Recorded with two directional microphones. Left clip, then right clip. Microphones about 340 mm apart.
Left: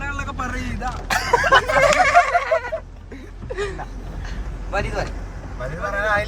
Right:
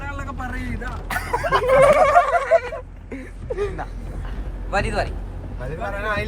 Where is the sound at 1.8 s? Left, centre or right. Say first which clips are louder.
Right 2 dB; centre.